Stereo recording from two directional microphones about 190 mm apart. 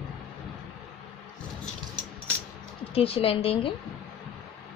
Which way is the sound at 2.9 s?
30° left (ahead or behind).